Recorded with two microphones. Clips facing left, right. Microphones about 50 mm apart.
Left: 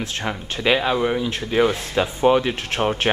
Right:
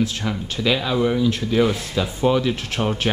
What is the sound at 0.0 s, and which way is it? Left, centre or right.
Speech, left.